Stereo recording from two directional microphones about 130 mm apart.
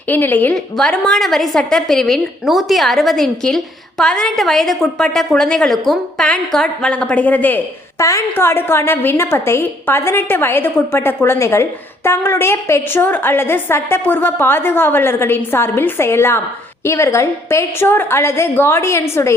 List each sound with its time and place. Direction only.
0.1 s a woman's voice: 15° left (ahead or behind)